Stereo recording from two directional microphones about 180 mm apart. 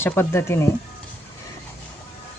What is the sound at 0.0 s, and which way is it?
Speech, 15° left (ahead or behind).